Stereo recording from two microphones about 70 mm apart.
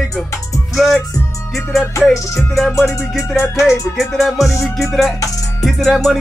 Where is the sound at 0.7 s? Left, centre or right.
Centre.